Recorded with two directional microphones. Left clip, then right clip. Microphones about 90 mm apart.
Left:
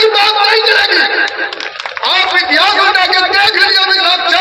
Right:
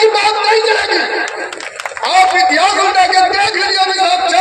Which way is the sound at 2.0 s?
30° right (ahead or behind).